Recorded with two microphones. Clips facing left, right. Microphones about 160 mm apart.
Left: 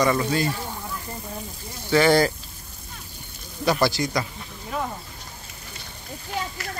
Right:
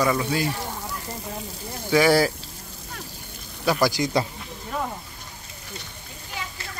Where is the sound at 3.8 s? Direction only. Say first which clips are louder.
Right 2 dB; 15° right (ahead or behind).